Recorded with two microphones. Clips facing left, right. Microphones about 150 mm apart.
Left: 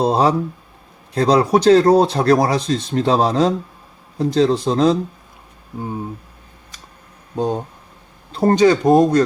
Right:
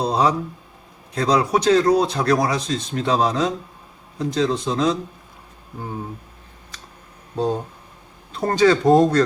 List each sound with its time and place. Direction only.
0.0 s speech: 30° left (ahead or behind)
7.3 s speech: 15° left (ahead or behind)
8.3 s speech: 30° left (ahead or behind)
8.6 s speech: 15° left (ahead or behind)